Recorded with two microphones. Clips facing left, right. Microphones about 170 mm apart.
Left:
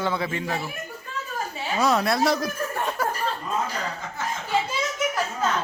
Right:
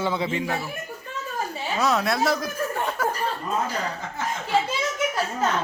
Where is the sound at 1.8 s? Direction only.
Centre (ahead or behind).